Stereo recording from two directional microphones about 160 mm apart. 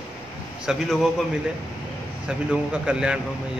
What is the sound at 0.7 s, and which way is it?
Speech, 5° right (ahead or behind).